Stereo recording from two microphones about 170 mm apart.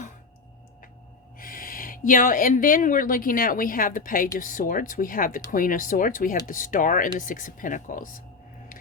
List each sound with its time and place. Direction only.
1.4 s speech: 55° left (ahead or behind)